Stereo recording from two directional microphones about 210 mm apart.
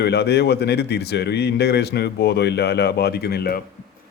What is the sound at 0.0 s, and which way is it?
Speech, 50° left (ahead or behind).